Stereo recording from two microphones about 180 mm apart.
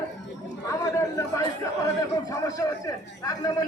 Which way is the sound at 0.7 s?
20° left (ahead or behind).